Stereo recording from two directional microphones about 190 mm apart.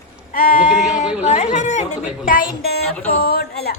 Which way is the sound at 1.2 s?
35° left (ahead or behind).